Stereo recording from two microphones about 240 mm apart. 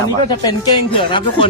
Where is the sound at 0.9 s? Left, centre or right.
Left.